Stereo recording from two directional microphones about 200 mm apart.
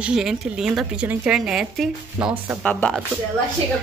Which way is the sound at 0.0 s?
5° right (ahead or behind).